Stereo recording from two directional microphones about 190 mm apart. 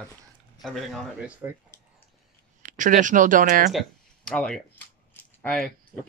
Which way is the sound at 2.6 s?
45° right (ahead or behind).